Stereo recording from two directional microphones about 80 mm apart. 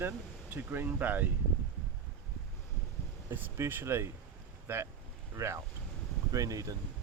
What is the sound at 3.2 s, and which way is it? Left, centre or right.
Speech, right.